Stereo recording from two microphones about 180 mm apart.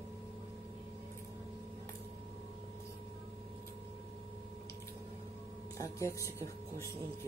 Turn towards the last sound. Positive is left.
turn(degrees=15)  # may be behind; listen again after turning